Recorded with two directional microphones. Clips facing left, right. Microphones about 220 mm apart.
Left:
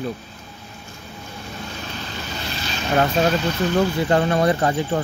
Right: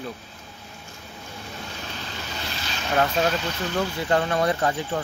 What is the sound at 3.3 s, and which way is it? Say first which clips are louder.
Speech: left 7 dB; 50° left (ahead or behind).